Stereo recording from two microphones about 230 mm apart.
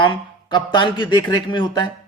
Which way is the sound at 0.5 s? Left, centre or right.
Centre.